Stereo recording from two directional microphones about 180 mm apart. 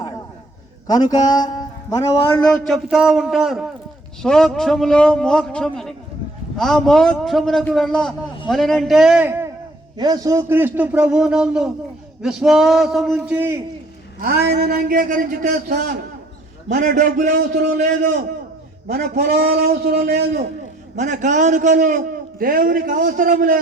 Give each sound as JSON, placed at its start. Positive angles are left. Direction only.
{"t": 0.9, "sound": "a man's voice", "side_deg": 20}
{"t": 2.6, "sound": "a man's voice", "side_deg": 0}
{"t": 10.0, "sound": "a man's voice", "side_deg": -20}
{"t": 14.2, "sound": "a man's voice", "side_deg": -60}
{"t": 18.9, "sound": "a man's voice", "side_deg": -60}
{"t": 20.9, "sound": "a man's voice", "side_deg": -40}